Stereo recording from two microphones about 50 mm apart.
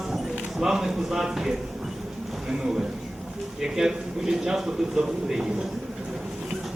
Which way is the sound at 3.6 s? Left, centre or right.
Centre.